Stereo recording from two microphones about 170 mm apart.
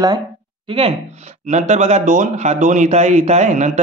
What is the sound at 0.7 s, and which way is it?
A man's voice, 35° right (ahead or behind).